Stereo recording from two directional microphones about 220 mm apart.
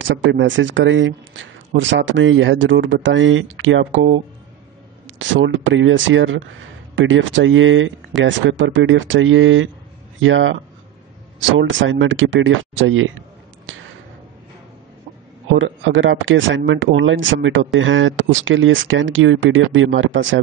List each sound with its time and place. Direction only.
0.1 s speech: 55° right (ahead or behind)
13.7 s a sound: 60° right (ahead or behind)
15.5 s speech: 60° right (ahead or behind)